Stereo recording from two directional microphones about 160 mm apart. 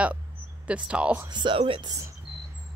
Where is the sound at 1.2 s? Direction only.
30° right (ahead or behind).